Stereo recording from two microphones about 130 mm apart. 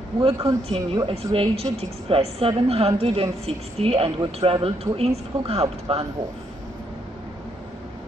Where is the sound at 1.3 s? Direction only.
45° right (ahead or behind).